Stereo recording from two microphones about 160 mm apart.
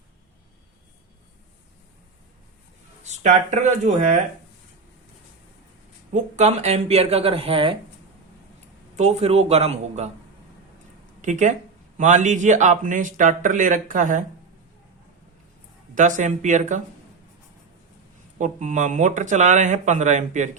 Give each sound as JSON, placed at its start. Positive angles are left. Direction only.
{"t": 3.0, "sound": "speech", "side_deg": -45}
{"t": 6.3, "sound": "speech", "side_deg": -45}
{"t": 9.0, "sound": "speech", "side_deg": -45}
{"t": 11.2, "sound": "a man's voice", "side_deg": -50}
{"t": 16.0, "sound": "a man's voice", "side_deg": -50}
{"t": 18.3, "sound": "a man's voice", "side_deg": -50}